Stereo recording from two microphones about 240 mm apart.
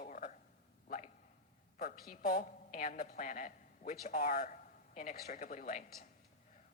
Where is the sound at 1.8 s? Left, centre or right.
Left.